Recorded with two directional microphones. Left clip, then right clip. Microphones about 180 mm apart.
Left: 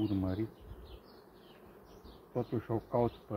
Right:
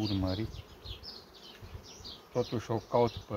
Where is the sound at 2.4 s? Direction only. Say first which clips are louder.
Right 3 dB; 35° right (ahead or behind).